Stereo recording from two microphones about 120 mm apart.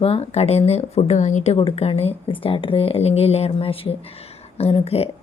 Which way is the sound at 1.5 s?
55° left (ahead or behind).